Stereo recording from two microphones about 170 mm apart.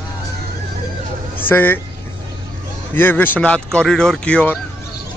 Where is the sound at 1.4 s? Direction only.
10° left (ahead or behind).